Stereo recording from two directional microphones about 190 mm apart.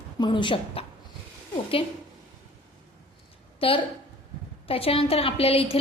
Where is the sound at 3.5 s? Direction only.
30° left (ahead or behind).